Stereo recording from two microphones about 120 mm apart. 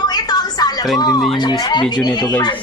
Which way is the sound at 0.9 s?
35° left (ahead or behind).